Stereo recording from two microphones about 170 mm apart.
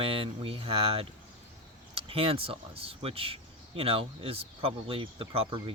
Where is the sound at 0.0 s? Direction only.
35° right (ahead or behind).